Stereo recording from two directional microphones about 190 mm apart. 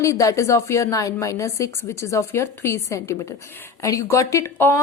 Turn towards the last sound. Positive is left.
turn(degrees=15)  # may be behind; listen again after turning